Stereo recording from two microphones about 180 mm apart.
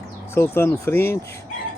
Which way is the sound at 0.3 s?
15° left (ahead or behind).